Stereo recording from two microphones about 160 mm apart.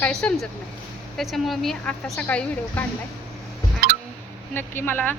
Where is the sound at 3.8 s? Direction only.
70° right (ahead or behind).